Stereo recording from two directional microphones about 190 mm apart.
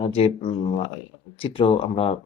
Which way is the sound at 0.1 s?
30° left (ahead or behind).